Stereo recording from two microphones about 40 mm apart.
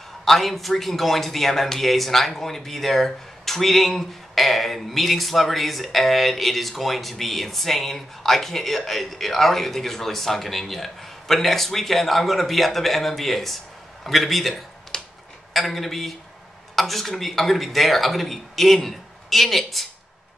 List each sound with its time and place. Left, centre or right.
0.2 s speech: centre
14.9 s a sound: centre
15.5 s speech: centre